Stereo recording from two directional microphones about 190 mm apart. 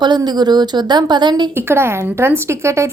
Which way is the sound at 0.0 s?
20° right (ahead or behind).